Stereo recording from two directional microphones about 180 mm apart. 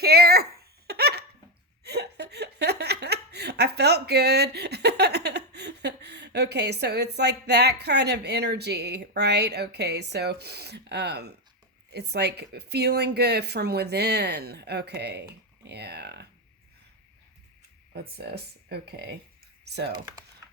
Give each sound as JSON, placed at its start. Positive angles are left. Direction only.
{"t": 0.0, "sound": "a sound", "side_deg": -60}
{"t": 1.8, "sound": "speech", "side_deg": -65}
{"t": 18.2, "sound": "speech", "side_deg": -65}